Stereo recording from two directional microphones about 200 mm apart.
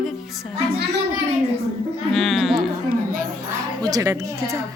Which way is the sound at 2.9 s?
45° right (ahead or behind).